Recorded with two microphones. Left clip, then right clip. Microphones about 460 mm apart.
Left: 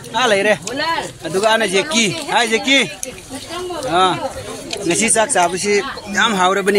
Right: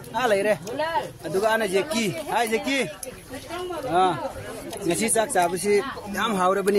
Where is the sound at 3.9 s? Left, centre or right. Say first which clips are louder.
Left 6 dB; right.